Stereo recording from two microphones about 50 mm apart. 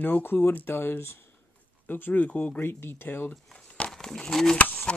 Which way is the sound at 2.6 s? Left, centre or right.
Left.